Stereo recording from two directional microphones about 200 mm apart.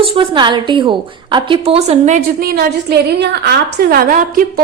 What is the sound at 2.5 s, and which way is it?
A woman's voice, 50° right (ahead or behind).